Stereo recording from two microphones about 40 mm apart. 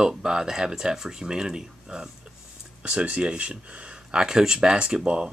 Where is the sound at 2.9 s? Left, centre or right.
Right.